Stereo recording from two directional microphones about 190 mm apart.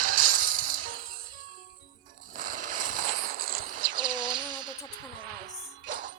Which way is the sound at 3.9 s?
25° right (ahead or behind).